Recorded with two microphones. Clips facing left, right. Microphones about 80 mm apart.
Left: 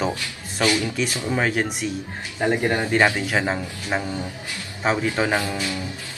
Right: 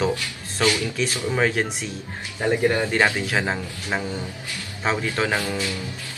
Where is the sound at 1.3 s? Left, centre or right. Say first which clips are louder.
Right 1 dB; centre.